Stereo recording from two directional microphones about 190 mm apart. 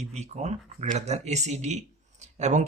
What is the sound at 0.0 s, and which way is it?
Speech, 35° right (ahead or behind).